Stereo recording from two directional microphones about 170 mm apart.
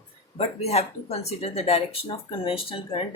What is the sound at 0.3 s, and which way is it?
Speech, 40° left (ahead or behind).